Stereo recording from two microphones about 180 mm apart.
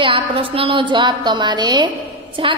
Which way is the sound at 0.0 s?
30° right (ahead or behind).